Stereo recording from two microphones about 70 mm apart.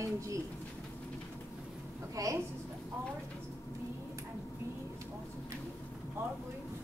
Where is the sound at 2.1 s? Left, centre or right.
Right.